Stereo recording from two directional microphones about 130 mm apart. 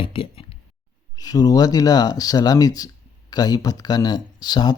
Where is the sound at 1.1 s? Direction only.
30° left (ahead or behind).